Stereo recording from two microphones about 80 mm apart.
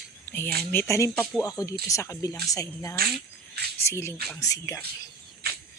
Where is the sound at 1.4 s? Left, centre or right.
Left.